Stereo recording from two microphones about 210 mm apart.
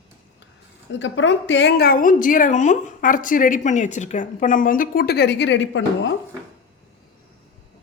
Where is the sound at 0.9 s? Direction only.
60° left (ahead or behind).